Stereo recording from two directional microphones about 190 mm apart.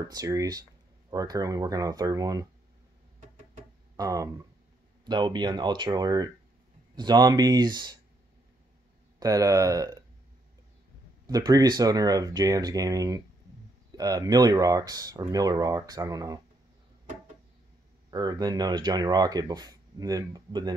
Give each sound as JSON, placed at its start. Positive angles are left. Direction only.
{"t": 0.0, "sound": "speech", "side_deg": -20}
{"t": 3.9, "sound": "speech", "side_deg": -15}
{"t": 9.2, "sound": "speech", "side_deg": -20}
{"t": 11.2, "sound": "speech", "side_deg": -20}
{"t": 18.1, "sound": "speech", "side_deg": -20}